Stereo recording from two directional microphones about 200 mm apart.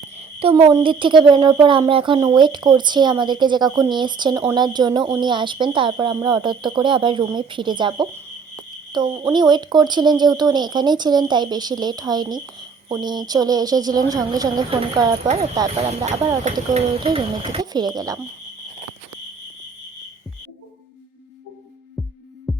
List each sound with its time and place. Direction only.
0.2 s a woman's voice: 30° right (ahead or behind)
15.7 s a woman's voice: 30° right (ahead or behind); by 18.2 s 15° right (ahead or behind)
22.5 s heart murmur: centre (ahead or behind)